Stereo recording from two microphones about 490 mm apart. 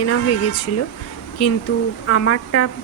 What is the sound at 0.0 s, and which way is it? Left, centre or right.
Speech, left.